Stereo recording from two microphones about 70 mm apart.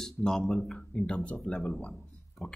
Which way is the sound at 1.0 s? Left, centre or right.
Centre.